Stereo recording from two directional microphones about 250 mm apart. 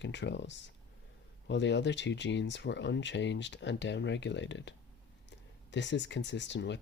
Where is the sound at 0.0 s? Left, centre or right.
Left.